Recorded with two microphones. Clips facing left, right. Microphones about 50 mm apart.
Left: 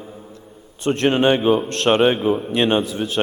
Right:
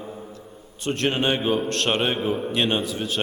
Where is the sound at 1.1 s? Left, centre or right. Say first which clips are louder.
Left 8 dB; centre.